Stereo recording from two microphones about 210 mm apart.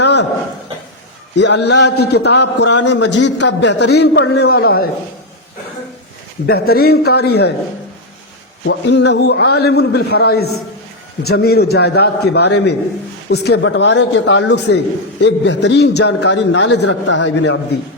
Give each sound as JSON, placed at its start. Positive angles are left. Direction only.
{"t": 0.0, "sound": "a sound", "side_deg": 55}
{"t": 1.4, "sound": "a man's voice", "side_deg": 55}
{"t": 6.4, "sound": "a man's voice", "side_deg": 50}
{"t": 8.6, "sound": "a man's voice", "side_deg": 55}